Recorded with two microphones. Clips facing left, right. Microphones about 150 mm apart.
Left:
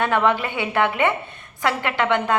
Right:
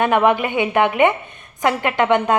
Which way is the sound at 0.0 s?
15° right (ahead or behind).